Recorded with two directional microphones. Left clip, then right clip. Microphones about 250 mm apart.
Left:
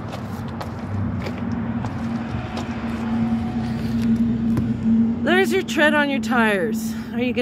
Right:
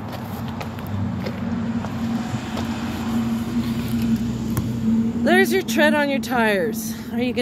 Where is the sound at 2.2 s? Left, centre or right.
Right.